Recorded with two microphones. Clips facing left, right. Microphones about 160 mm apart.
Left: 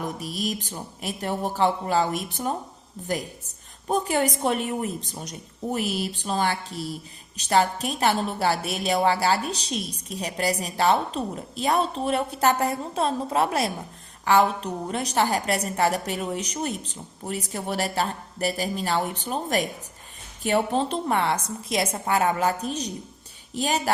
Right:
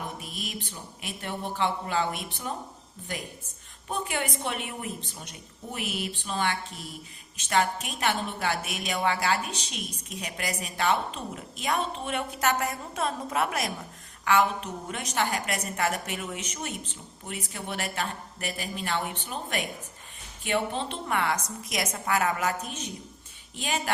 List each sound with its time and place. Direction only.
0.2 s a woman's voice: 40° left (ahead or behind)
3.8 s a woman's voice: 40° left (ahead or behind)